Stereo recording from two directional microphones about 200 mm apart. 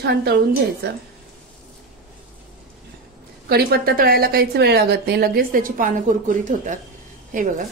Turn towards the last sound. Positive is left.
turn(degrees=-40)  # may be behind; listen again after turning